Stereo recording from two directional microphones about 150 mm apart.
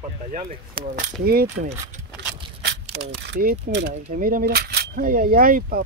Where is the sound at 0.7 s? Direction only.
80° right.